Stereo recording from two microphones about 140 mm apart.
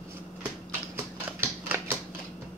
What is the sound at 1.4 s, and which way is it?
Typewriter, 15° right (ahead or behind).